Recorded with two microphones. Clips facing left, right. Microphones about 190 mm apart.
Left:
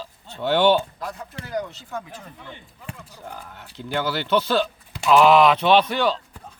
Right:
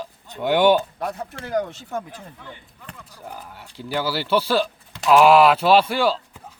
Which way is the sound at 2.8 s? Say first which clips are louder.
Left 3 dB; 5° left (ahead or behind).